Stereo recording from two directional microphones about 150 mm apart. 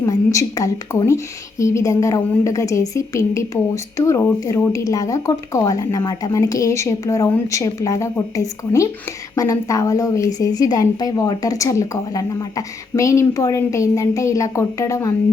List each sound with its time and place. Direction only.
0.0 s a woman's voice: 20° left (ahead or behind)